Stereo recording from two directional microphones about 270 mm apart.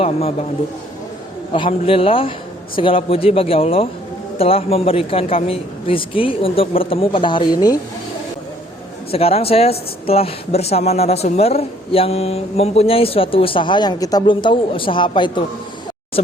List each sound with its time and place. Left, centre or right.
0.0 s speech: left
1.5 s speech: centre
9.1 s speech: left